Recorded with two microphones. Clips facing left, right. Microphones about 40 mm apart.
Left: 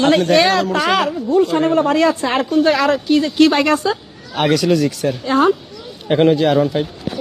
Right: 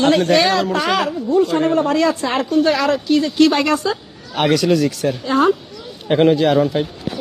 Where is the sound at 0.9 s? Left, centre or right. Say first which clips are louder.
Left 1 dB; left.